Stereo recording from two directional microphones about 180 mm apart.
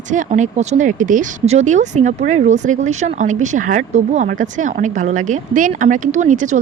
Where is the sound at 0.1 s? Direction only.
45° right (ahead or behind).